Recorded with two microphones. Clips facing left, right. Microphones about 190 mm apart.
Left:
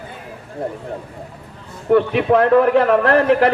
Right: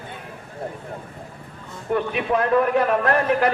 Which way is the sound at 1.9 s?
65° left (ahead or behind).